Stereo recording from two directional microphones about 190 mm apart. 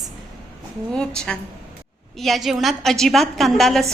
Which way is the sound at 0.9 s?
5° left (ahead or behind).